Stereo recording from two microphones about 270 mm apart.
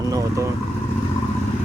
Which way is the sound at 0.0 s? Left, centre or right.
Centre.